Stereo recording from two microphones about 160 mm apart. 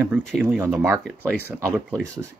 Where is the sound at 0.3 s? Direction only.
5° right (ahead or behind).